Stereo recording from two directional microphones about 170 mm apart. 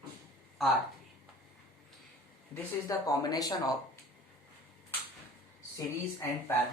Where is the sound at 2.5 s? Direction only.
20° left (ahead or behind).